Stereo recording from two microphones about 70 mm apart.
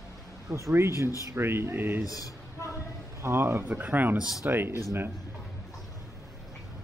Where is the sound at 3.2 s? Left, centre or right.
Right.